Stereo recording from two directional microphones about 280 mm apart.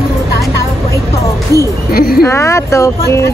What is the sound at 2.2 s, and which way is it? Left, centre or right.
Speech, centre.